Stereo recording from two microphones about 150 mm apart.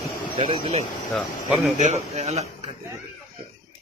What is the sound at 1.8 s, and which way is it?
Speech, 50° right (ahead or behind).